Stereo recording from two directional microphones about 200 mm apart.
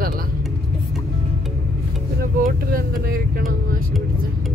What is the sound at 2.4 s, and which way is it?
Vehicle, 45° right (ahead or behind).